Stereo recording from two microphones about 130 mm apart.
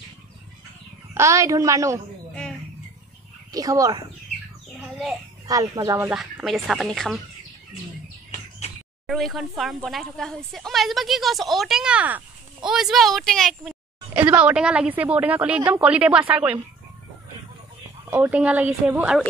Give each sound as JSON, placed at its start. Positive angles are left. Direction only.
{"t": 1.1, "sound": "a woman's voice", "side_deg": -20}
{"t": 3.5, "sound": "a woman's voice", "side_deg": -25}
{"t": 5.5, "sound": "a woman's voice", "side_deg": -25}
{"t": 6.0, "sound": "a woman's voice", "side_deg": -10}
{"t": 6.4, "sound": "speech", "side_deg": 0}
{"t": 9.0, "sound": "speech", "side_deg": 0}
{"t": 14.1, "sound": "a woman's voice", "side_deg": -10}
{"t": 18.1, "sound": "a woman's voice", "side_deg": -10}